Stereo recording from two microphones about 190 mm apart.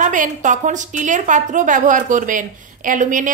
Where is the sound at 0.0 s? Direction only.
40° right (ahead or behind).